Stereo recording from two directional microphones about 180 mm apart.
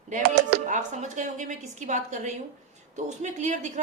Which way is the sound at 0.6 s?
45° right (ahead or behind).